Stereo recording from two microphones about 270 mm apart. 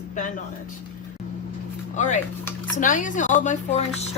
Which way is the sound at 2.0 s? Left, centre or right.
Left.